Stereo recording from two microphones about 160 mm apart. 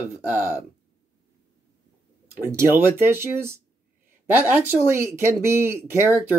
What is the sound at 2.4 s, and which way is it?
Speech, 15° right (ahead or behind).